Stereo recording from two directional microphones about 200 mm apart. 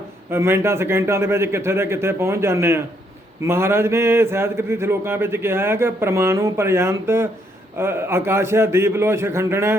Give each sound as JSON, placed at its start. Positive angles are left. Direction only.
{"t": 0.3, "sound": "speech", "side_deg": -15}